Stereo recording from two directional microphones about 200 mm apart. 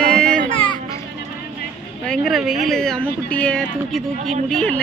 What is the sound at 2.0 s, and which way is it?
Speech, 5° left (ahead or behind).